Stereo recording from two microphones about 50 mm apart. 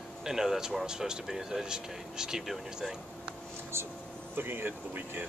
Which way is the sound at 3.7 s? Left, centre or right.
Right.